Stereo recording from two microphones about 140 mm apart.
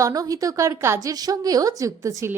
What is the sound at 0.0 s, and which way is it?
A woman's voice, 25° right (ahead or behind).